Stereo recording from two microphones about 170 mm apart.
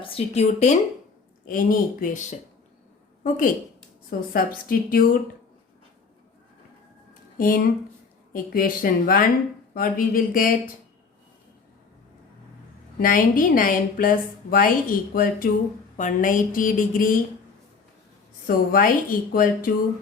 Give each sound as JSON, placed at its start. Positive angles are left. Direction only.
{"t": 0.0, "sound": "speech", "side_deg": 35}
{"t": 1.5, "sound": "speech", "side_deg": 55}
{"t": 3.2, "sound": "a woman's voice", "side_deg": 50}
{"t": 7.1, "sound": "a sound", "side_deg": 55}
{"t": 8.3, "sound": "a woman's voice", "side_deg": 55}
{"t": 13.0, "sound": "a woman's voice", "side_deg": 55}
{"t": 18.4, "sound": "a woman's voice", "side_deg": 55}